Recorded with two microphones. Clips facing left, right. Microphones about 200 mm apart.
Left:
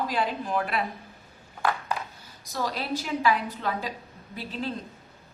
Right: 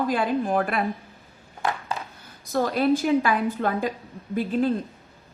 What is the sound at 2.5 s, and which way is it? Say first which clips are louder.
A woman's voice: right 9 dB; 50° right (ahead or behind).